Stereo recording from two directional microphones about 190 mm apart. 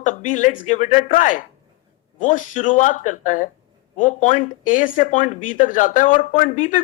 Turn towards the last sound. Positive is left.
turn(degrees=40)  # may be behind; listen again after turning